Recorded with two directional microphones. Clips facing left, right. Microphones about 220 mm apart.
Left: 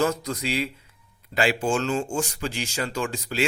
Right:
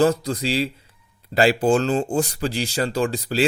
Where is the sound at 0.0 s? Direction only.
30° right (ahead or behind).